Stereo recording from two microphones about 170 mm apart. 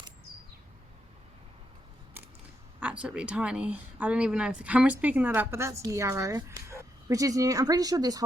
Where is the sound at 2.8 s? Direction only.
5° right (ahead or behind).